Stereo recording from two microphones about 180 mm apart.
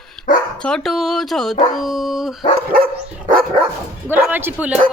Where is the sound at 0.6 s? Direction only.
5° left (ahead or behind).